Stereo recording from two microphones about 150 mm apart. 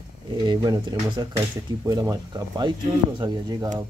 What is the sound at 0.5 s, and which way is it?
Speech, 30° right (ahead or behind).